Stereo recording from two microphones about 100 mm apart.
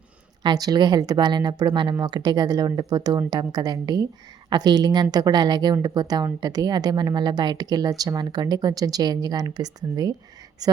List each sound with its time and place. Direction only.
0.4 s speech: 40° right (ahead or behind)